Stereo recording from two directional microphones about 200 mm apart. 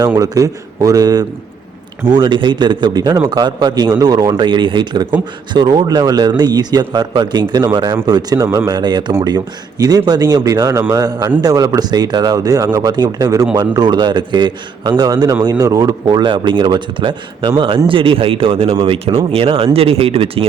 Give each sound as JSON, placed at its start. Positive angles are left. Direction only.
{"t": 0.0, "sound": "a man's voice", "side_deg": -15}